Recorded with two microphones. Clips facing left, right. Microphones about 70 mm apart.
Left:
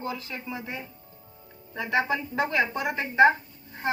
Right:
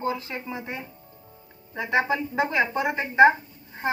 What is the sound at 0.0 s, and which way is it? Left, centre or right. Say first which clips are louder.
A woman's voice: right 5 dB; right.